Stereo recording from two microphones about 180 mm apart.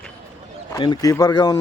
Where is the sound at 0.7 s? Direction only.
25° left (ahead or behind).